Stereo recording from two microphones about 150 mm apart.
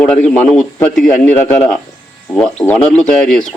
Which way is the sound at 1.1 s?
50° left (ahead or behind).